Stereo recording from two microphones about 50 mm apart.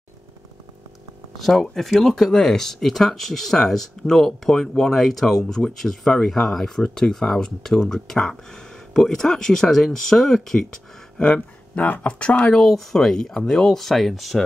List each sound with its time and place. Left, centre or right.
1.4 s speech: centre
11.1 s speech: left
12.1 s speech: left
12.5 s speech: centre